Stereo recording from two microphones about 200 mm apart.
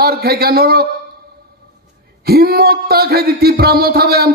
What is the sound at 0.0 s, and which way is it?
Speech, 50° right (ahead or behind).